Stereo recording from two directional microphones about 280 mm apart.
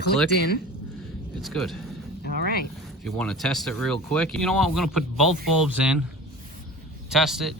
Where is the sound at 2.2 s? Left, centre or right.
Left.